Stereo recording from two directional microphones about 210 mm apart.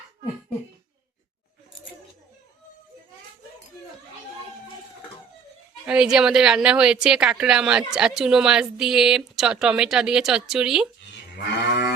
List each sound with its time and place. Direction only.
5.8 s a woman's voice: 5° right (ahead or behind)
11.1 s moo: 55° left (ahead or behind)